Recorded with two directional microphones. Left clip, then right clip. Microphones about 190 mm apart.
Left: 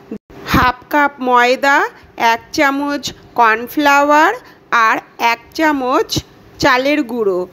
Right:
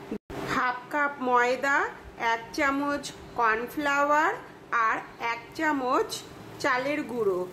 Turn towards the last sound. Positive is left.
turn(degrees=35)  # may be behind; listen again after turning